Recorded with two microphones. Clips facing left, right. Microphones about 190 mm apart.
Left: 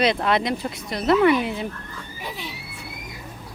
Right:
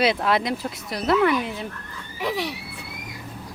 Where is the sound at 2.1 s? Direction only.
80° right.